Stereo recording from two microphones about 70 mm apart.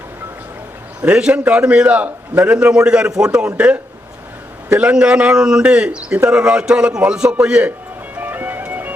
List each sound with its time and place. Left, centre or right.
1.0 s speech: centre
8.1 s music: right